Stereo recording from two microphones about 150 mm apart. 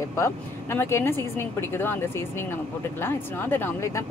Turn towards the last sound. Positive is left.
turn(degrees=15)  # may be behind; listen again after turning